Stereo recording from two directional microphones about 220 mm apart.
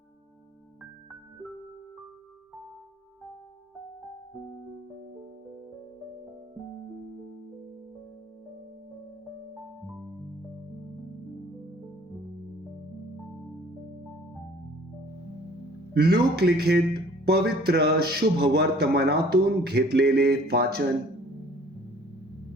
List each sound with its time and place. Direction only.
16.0 s speech: 45° right (ahead or behind)